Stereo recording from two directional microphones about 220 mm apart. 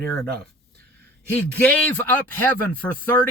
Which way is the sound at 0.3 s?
45° right (ahead or behind).